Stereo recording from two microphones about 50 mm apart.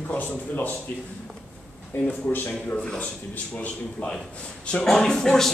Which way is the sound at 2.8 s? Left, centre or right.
Centre.